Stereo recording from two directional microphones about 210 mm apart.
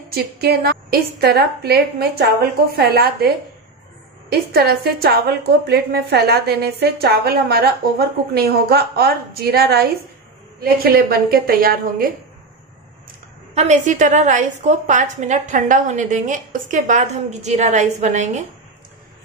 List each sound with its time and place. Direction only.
0.1 s a woman's voice: 50° right (ahead or behind)
4.3 s a woman's voice: 50° right (ahead or behind)
13.6 s a woman's voice: 35° right (ahead or behind)